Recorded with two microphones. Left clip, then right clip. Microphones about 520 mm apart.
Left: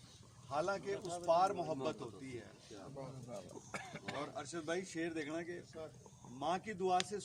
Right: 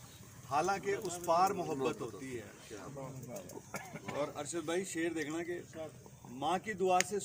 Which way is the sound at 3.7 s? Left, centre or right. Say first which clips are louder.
Right 1 dB; left.